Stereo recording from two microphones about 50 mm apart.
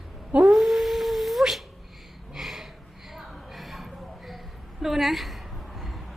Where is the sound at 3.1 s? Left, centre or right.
Centre.